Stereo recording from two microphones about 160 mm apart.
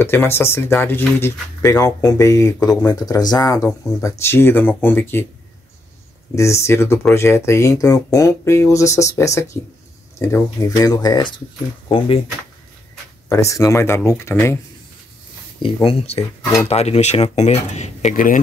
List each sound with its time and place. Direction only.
0.0 s speech: 15° left (ahead or behind)
6.3 s speech: 20° left (ahead or behind)
13.3 s speech: 20° left (ahead or behind)
15.6 s speech: 35° left (ahead or behind); by 18.4 s 55° left (ahead or behind)